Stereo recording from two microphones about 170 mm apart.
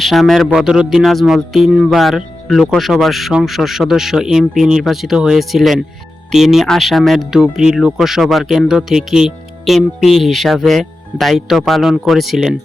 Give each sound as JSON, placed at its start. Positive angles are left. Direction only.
{"t": 0.0, "sound": "speech", "side_deg": 0}